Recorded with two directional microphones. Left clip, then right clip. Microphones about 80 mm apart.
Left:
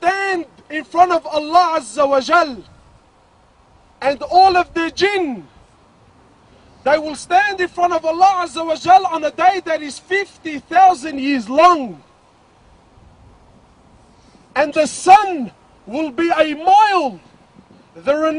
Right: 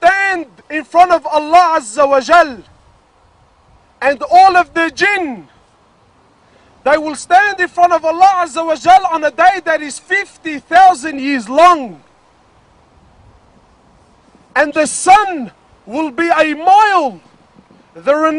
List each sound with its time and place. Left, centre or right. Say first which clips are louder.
0.0 s a sound: right 6 dB; right
4.0 s a man's voice: right 4 dB; right
6.8 s a man's voice: right 3 dB; right
14.5 s a man's voice: right 3 dB; right